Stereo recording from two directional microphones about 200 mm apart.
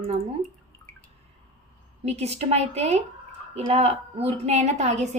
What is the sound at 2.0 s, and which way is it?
A woman's voice, 30° right (ahead or behind).